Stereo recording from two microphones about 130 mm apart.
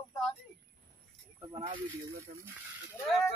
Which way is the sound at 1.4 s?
35° right (ahead or behind).